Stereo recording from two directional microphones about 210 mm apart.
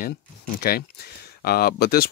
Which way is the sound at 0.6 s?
45° left (ahead or behind).